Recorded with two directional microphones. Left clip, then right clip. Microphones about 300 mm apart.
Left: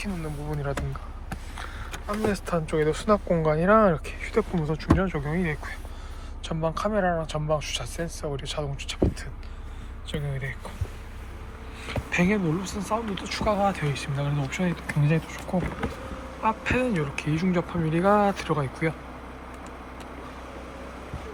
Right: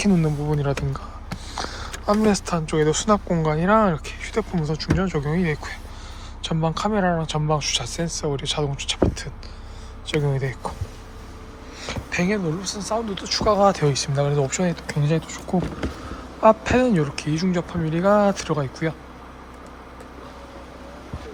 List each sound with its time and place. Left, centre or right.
0.0 s speech: centre
10.1 s speech: centre
11.9 s speech: centre
16.4 s speech: centre